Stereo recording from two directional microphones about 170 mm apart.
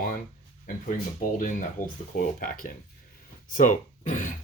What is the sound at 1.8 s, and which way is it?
Speech, 50° left (ahead or behind).